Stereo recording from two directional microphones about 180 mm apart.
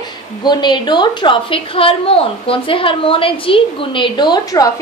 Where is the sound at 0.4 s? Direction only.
25° left (ahead or behind).